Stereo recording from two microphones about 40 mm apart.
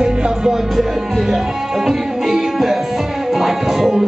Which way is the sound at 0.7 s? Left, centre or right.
Centre.